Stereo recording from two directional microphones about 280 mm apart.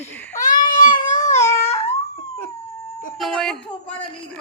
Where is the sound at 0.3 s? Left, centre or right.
Left.